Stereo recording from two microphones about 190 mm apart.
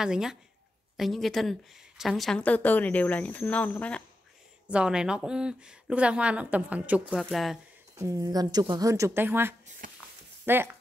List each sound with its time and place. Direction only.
0.0 s a woman's voice: 5° right (ahead or behind)
4.6 s speech: 5° right (ahead or behind)
7.9 s speech: 15° right (ahead or behind)
9.8 s a sound: 45° right (ahead or behind)
10.4 s speech: 10° right (ahead or behind)